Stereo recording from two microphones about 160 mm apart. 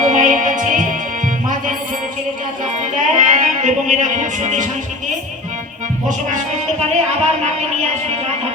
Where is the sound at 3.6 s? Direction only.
50° right (ahead or behind).